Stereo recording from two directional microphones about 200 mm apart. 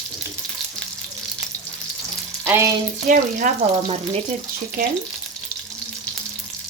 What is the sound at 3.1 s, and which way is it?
Speech, 40° right (ahead or behind).